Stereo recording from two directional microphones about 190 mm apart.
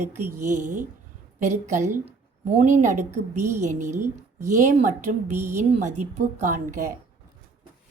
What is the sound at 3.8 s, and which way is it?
Speech, 15° right (ahead or behind).